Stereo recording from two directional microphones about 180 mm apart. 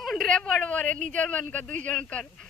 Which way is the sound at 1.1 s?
10° left (ahead or behind).